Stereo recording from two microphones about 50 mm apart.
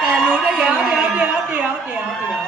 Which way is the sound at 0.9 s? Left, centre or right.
Right.